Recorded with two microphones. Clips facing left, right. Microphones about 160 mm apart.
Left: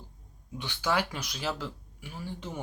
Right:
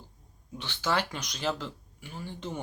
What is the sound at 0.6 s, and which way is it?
Speech, 10° left (ahead or behind).